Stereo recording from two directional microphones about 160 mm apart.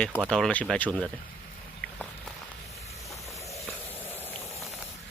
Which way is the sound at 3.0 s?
20° left (ahead or behind).